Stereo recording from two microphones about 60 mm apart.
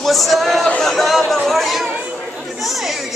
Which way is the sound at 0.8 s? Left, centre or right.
Centre.